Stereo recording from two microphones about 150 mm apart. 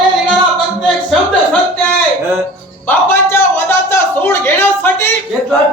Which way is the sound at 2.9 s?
15° left (ahead or behind).